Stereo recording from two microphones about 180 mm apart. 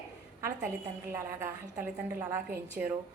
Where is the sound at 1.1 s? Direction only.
15° right (ahead or behind).